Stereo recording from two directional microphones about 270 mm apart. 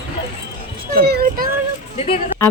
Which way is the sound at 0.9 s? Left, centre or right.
Right.